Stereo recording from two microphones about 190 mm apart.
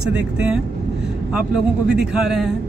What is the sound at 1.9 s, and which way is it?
Speech, 5° right (ahead or behind).